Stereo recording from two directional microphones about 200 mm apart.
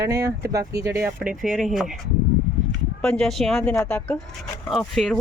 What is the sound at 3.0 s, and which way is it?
Speech, 5° left (ahead or behind).